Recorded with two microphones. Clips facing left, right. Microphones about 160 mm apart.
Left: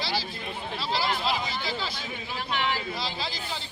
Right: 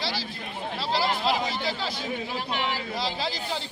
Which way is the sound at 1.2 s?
60° right (ahead or behind).